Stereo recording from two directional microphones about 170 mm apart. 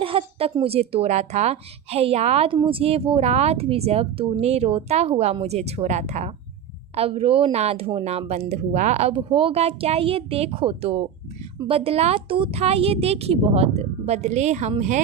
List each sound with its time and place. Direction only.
0.0 s speech: 30° right (ahead or behind)